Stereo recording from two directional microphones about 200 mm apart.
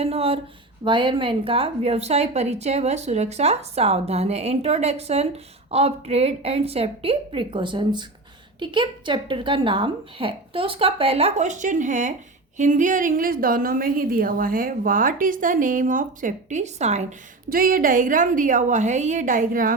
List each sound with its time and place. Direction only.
0.0 s a woman's voice: 30° right (ahead or behind)
17.5 s a woman's voice: 45° right (ahead or behind)